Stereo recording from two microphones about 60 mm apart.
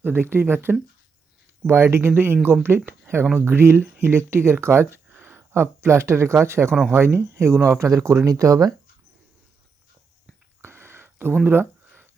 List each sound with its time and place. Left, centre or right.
0.0 s speech: right
10.6 s a sound: right
11.4 s speech: right